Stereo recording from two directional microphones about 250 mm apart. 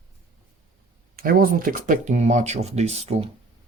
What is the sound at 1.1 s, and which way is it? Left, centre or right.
Speech, right.